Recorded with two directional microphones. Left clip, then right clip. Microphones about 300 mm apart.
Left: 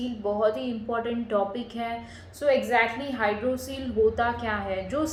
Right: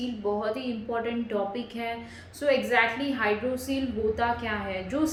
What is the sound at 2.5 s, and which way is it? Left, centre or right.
A woman's voice, centre.